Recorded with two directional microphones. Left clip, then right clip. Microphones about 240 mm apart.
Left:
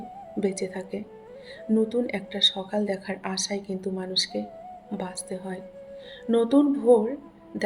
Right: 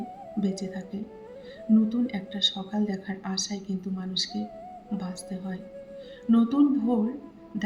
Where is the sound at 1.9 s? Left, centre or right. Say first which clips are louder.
Left 4 dB; left.